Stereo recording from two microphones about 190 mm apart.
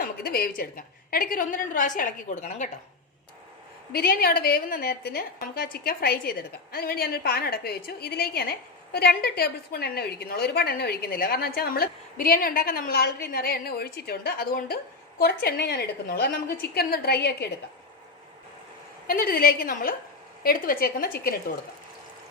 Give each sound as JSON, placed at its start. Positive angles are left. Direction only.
{"t": 0.0, "sound": "a woman's voice", "side_deg": 55}
{"t": 3.9, "sound": "a woman's voice", "side_deg": 55}
{"t": 19.0, "sound": "a woman's voice", "side_deg": 50}